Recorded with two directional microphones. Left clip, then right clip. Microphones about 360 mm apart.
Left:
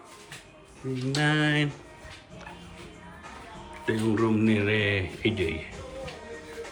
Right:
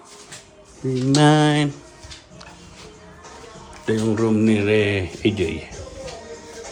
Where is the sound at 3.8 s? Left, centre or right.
Centre.